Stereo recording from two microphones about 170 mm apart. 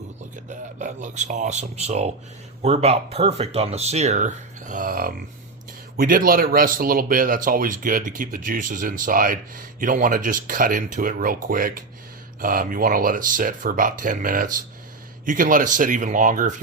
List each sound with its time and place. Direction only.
0.5 s speech: 45° right (ahead or behind)